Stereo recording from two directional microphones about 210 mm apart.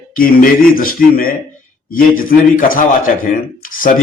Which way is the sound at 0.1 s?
40° left (ahead or behind).